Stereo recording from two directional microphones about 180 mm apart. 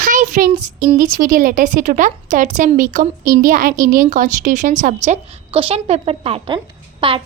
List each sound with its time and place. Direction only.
0.0 s child singing: 45° right (ahead or behind)
0.9 s a woman's voice: 45° right (ahead or behind); by 7.2 s 30° right (ahead or behind)